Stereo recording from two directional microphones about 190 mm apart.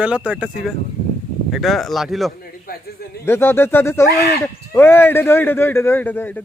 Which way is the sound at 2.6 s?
55° left (ahead or behind).